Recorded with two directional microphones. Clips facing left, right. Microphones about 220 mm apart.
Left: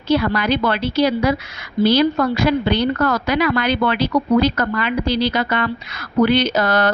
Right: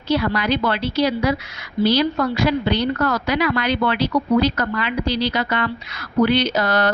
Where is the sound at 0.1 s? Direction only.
50° left (ahead or behind).